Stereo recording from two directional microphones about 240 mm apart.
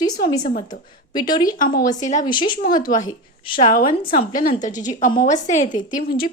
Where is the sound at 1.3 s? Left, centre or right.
Centre.